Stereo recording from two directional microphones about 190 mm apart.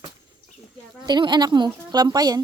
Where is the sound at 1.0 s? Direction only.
25° right (ahead or behind).